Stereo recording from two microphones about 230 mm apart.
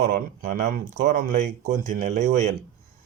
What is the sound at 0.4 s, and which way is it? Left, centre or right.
A man's voice, right.